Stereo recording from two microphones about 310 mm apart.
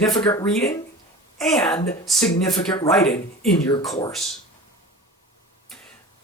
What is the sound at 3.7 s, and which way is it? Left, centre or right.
Speech, centre.